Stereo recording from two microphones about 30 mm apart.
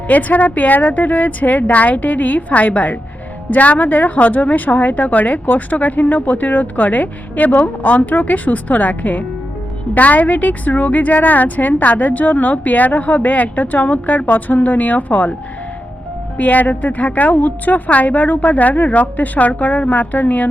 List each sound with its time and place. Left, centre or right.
0.1 s a woman's voice: left
2.5 s a woman's voice: left
14.3 s a woman's voice: left
16.4 s a woman's voice: left